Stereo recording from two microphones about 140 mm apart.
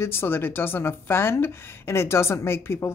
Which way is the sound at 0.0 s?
15° left (ahead or behind).